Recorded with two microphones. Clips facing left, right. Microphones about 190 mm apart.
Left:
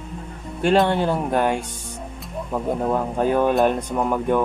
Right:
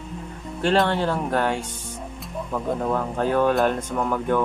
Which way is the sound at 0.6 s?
15° left (ahead or behind).